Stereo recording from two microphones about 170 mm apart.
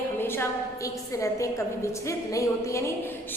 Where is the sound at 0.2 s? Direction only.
15° left (ahead or behind).